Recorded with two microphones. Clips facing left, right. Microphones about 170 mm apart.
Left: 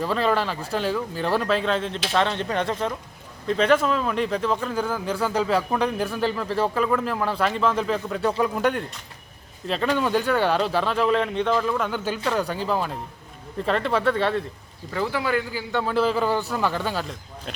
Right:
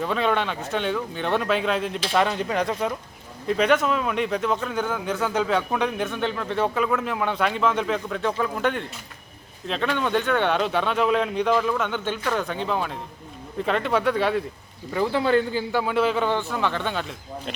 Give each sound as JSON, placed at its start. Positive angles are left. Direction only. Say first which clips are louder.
{"t": 0.0, "sound": "speech", "louder": "left 1 dB", "side_deg": 0}
{"t": 14.9, "sound": "speech", "louder": "right 4 dB", "side_deg": -20}
{"t": 15.7, "sound": "speech", "louder": "left 1 dB", "side_deg": -5}